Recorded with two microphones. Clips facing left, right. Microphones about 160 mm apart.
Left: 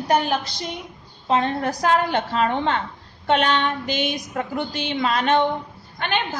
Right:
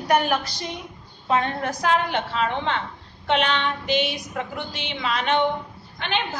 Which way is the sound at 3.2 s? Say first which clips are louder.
Left 3 dB; 45° left (ahead or behind).